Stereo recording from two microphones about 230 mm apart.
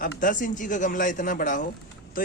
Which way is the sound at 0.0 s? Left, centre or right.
Left.